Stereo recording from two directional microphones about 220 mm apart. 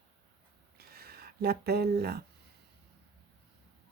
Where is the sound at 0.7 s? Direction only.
45° right (ahead or behind).